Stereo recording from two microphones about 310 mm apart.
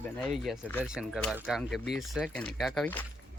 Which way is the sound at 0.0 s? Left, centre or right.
Centre.